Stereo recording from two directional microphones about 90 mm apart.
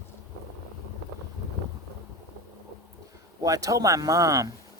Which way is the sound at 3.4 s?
40° right (ahead or behind).